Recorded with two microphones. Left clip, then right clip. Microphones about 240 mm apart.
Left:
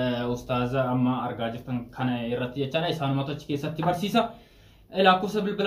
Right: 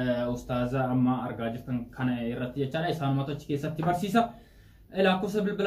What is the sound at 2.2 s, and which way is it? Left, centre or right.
Speech, centre.